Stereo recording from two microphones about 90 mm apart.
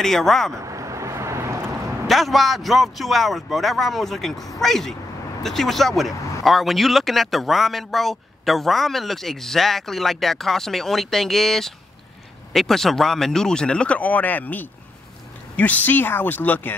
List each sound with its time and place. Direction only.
0.0 s speech: 5° left (ahead or behind)
0.7 s vehicle: 35° right (ahead or behind)
2.0 s a woman's voice: centre (ahead or behind); by 16.7 s 20° left (ahead or behind)